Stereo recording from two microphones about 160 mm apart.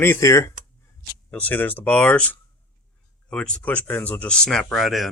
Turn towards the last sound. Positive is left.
turn(degrees=0)  # may be behind; listen again after turning